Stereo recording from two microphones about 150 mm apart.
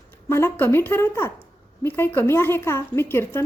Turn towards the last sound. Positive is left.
turn(degrees=15)  # may be behind; listen again after turning